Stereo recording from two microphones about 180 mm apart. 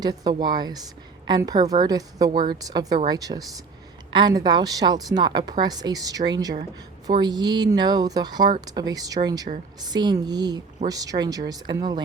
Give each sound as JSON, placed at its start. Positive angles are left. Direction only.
{"t": 0.0, "sound": "a woman's voice", "side_deg": -20}